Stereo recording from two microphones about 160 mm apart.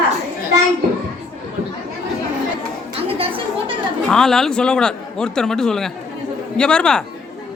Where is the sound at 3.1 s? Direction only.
35° right (ahead or behind).